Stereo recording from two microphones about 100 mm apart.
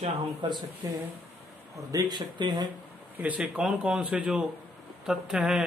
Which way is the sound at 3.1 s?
15° right (ahead or behind).